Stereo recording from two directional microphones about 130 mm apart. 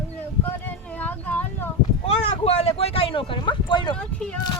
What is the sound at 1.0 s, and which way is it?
Speech, 15° left (ahead or behind).